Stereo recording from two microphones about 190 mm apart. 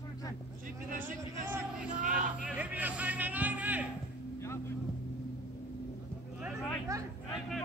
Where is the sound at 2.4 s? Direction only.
5° right (ahead or behind).